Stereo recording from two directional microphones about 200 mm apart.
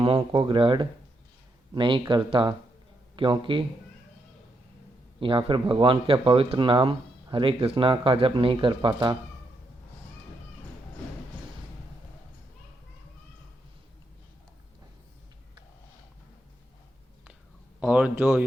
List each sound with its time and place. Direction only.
0.0 s speech: 25° right (ahead or behind)
5.2 s speech: 25° right (ahead or behind)
17.7 s speech: 5° right (ahead or behind)